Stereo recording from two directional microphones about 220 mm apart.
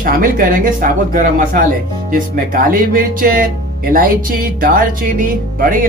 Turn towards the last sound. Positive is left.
turn(degrees=-40)  # may be behind; listen again after turning